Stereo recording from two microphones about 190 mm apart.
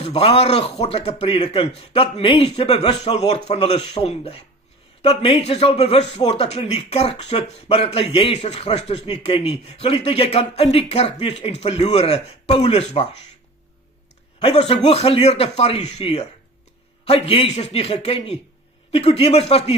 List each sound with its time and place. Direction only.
0.0 s a man's voice: 30° left (ahead or behind)
14.4 s a man's voice: 35° left (ahead or behind)